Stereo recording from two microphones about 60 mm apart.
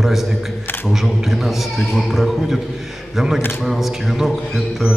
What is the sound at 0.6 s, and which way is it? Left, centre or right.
Speech, left.